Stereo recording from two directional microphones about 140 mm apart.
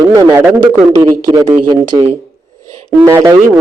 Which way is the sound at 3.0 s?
20° right (ahead or behind).